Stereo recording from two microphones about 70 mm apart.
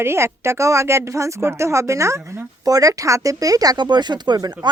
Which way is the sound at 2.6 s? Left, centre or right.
Right.